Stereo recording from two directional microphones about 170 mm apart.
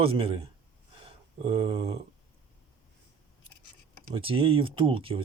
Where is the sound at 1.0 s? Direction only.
35° right (ahead or behind).